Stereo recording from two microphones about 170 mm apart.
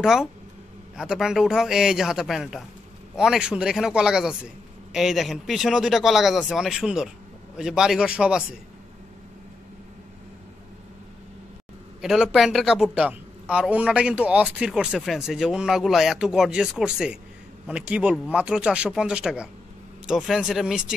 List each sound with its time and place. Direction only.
0.0 s a man's voice: centre (ahead or behind)
12.0 s a man's voice: 5° right (ahead or behind)